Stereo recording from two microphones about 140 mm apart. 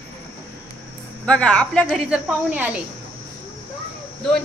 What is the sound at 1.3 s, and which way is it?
Speech, 10° left (ahead or behind).